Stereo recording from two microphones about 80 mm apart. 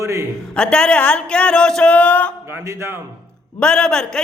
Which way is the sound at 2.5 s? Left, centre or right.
Right.